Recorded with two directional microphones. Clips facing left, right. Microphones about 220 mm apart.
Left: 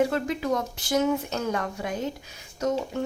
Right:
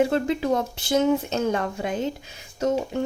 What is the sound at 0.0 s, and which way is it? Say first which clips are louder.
Speech: right 3 dB; 25° right (ahead or behind).